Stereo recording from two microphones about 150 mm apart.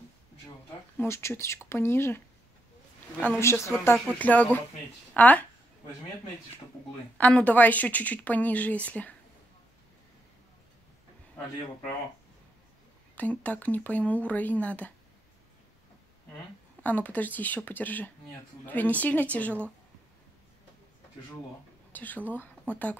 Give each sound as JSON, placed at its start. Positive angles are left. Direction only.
{"t": 0.9, "sound": "speech", "side_deg": 15}
{"t": 7.2, "sound": "speech", "side_deg": 10}
{"t": 13.1, "sound": "speech", "side_deg": 10}
{"t": 16.8, "sound": "speech", "side_deg": 10}
{"t": 21.9, "sound": "speech", "side_deg": 10}